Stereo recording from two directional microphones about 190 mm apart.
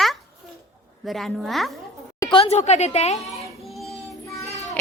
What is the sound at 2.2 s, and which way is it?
Speech, 25° left (ahead or behind).